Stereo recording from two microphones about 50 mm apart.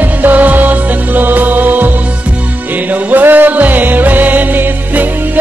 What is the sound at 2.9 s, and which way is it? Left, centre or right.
Music, right.